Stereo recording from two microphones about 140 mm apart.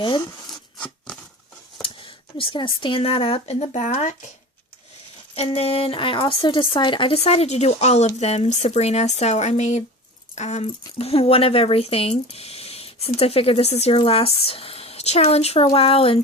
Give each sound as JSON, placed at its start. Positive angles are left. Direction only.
{"t": 0.0, "sound": "speech", "side_deg": 30}
{"t": 0.5, "sound": "a sound", "side_deg": 10}
{"t": 1.8, "sound": "speech", "side_deg": 40}
{"t": 5.3, "sound": "speech", "side_deg": 45}